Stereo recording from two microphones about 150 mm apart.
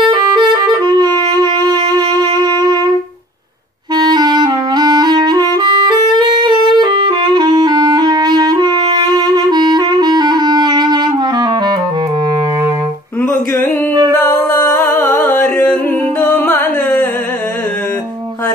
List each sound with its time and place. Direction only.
0.1 s music: 30° right (ahead or behind)
3.9 s clarinet: 25° right (ahead or behind)
13.2 s music: 15° left (ahead or behind)